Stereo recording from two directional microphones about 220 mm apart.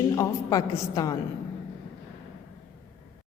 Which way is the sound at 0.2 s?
15° left (ahead or behind).